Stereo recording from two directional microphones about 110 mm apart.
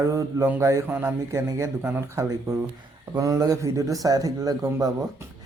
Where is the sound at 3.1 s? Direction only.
30° right (ahead or behind).